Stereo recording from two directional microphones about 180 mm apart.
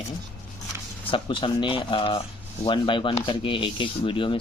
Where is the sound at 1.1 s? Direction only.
30° left (ahead or behind).